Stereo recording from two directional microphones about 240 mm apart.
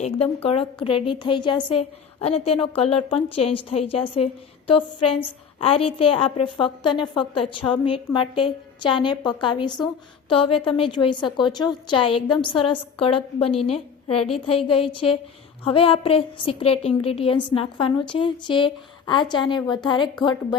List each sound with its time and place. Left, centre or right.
0.4 s a woman's voice: left